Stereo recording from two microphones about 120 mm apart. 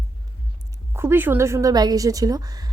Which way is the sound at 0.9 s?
20° right (ahead or behind).